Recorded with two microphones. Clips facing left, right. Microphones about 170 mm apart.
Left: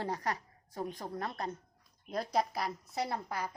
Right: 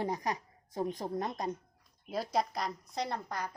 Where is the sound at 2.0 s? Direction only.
Centre (ahead or behind).